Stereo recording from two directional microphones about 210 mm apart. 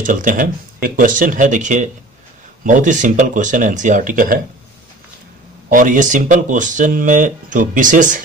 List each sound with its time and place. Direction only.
0.0 s speech: 40° right (ahead or behind)
5.7 s speech: 40° right (ahead or behind)